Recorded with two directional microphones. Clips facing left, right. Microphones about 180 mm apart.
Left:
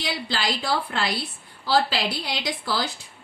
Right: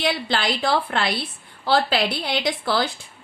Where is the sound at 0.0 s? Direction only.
55° right (ahead or behind).